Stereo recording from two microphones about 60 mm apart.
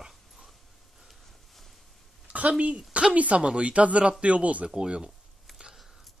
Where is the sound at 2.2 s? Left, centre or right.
Right.